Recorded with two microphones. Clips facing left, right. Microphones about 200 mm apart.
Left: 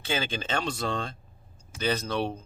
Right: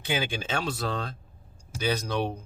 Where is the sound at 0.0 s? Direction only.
15° right (ahead or behind).